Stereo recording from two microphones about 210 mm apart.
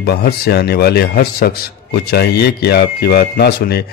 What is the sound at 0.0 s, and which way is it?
A man's voice, 50° left (ahead or behind).